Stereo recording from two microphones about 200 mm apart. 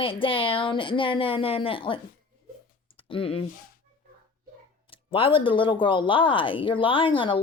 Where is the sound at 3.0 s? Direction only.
25° left (ahead or behind).